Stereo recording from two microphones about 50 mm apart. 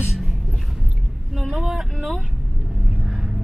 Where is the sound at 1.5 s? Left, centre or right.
Centre.